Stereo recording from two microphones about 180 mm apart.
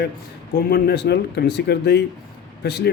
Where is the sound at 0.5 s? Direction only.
60° left (ahead or behind).